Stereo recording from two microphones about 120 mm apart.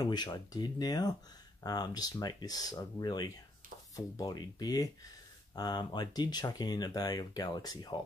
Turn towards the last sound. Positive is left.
turn(degrees=35)  # may be behind; listen again after turning